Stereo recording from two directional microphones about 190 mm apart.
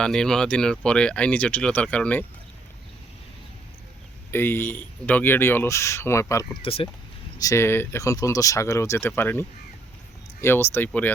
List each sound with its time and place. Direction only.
0.0 s speech: 5° left (ahead or behind)
4.3 s speech: 10° left (ahead or behind)
6.6 s speech: 30° left (ahead or behind)
7.3 s speech: 15° left (ahead or behind)